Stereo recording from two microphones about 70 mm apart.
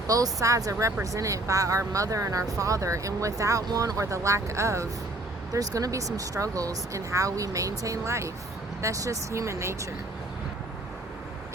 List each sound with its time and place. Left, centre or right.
0.1 s speech: right
5.5 s speech: right